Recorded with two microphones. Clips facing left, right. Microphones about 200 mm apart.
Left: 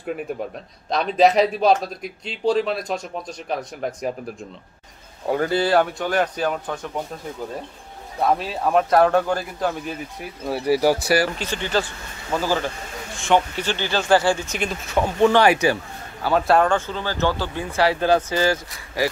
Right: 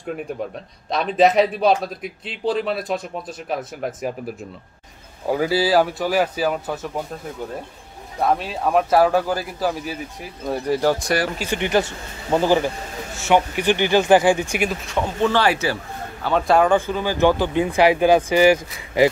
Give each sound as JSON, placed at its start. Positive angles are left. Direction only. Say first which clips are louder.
{"t": 0.8, "sound": "speech", "louder": "even", "side_deg": 0}
{"t": 5.2, "sound": "speech", "louder": "right 1 dB", "side_deg": -5}
{"t": 8.2, "sound": "speech", "louder": "even", "side_deg": 0}
{"t": 11.4, "sound": "speech", "louder": "right 4 dB", "side_deg": -15}
{"t": 15.3, "sound": "speech", "louder": "left 3 dB", "side_deg": 15}
{"t": 16.3, "sound": "speech", "louder": "even", "side_deg": 0}
{"t": 16.9, "sound": "speech", "louder": "right 5 dB", "side_deg": -15}